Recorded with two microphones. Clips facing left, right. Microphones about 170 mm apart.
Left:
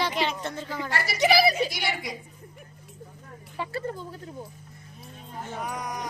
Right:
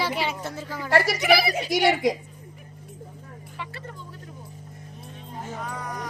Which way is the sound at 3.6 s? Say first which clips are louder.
Left 8 dB; 35° left (ahead or behind).